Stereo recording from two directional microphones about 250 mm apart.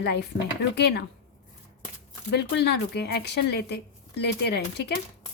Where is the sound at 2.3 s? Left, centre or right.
Left.